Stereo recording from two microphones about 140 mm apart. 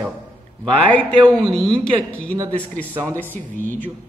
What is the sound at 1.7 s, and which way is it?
Speech, 10° left (ahead or behind).